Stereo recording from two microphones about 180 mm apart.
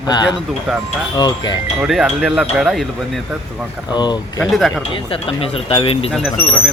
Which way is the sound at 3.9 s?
25° left (ahead or behind).